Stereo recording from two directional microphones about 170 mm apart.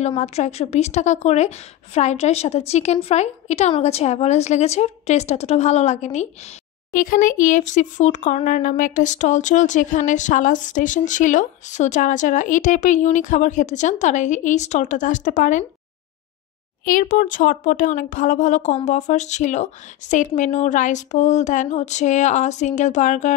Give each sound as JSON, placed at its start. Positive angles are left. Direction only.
{"t": 0.2, "sound": "a woman's voice", "side_deg": 40}
{"t": 6.9, "sound": "speech", "side_deg": 55}
{"t": 16.8, "sound": "speech", "side_deg": 55}